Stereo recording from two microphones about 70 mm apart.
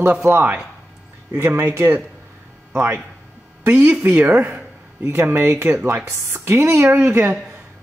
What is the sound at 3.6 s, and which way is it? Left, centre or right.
Speech, centre.